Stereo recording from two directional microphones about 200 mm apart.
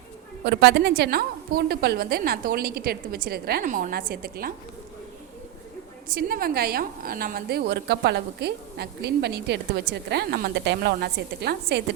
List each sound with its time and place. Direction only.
0.4 s a woman's voice: 60° right (ahead or behind)
6.1 s a woman's voice: 50° right (ahead or behind)